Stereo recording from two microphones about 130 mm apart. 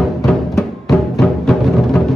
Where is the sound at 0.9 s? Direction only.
Centre (ahead or behind).